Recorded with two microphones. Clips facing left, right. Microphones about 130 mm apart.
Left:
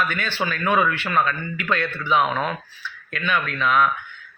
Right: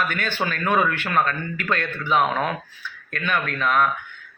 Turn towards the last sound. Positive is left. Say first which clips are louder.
# left 1 dB
turn(degrees=-45)  # may be behind; listen again after turning